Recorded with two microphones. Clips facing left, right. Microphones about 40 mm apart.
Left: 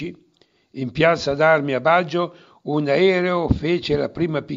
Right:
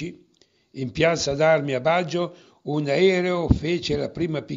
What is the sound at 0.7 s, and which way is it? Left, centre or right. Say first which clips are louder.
Speech: left 4 dB; centre.